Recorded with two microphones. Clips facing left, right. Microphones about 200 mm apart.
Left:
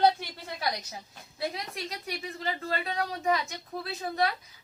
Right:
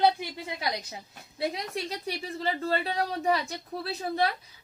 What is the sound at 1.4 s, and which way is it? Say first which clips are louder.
A woman's voice: right 3 dB; 25° right (ahead or behind).